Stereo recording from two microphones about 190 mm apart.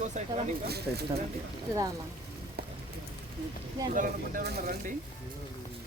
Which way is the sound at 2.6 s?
55° right (ahead or behind).